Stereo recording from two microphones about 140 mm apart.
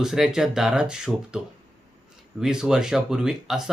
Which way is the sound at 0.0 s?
5° right (ahead or behind).